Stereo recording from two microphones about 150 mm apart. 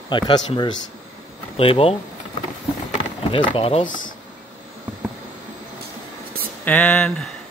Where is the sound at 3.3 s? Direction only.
35° left (ahead or behind).